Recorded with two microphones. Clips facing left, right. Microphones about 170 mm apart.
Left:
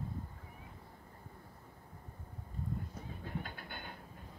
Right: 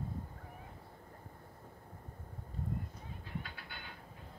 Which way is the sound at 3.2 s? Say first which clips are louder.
Left 2 dB; 50° left (ahead or behind).